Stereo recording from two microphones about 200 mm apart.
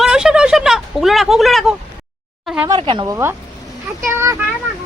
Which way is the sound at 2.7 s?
25° right (ahead or behind).